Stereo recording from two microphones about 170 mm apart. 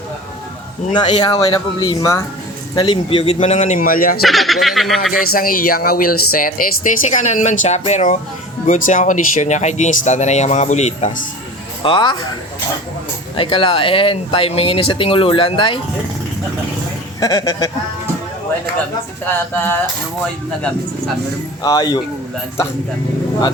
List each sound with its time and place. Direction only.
0.9 s speech: 25° left (ahead or behind); by 4.2 s 55° left (ahead or behind)
4.2 s speech: centre (ahead or behind)
5.2 s speech: 60° left (ahead or behind); by 11.1 s 40° left (ahead or behind)
11.8 s speech: 30° left (ahead or behind)
13.3 s speech: 30° left (ahead or behind)
17.2 s speech: 20° left (ahead or behind)
21.6 s speech: 25° left (ahead or behind)